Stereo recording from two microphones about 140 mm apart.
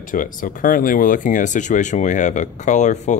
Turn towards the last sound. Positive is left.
turn(degrees=60)  # may be behind; listen again after turning